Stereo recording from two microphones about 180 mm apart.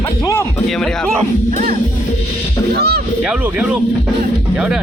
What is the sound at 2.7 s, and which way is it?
Speech, 60° right (ahead or behind).